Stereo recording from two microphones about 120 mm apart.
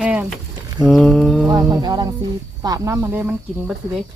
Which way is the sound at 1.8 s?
35° right (ahead or behind).